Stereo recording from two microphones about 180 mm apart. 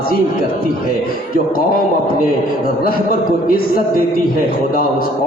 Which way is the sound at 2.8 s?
55° left (ahead or behind).